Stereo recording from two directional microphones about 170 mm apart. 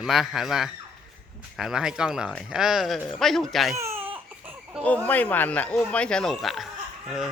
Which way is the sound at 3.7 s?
15° right (ahead or behind).